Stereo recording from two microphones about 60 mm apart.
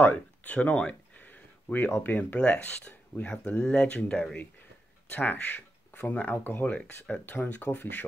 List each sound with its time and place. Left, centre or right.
0.0 s speech: left
5.1 s speech: left